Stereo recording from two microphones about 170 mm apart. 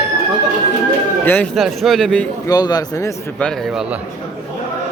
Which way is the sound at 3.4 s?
Centre (ahead or behind).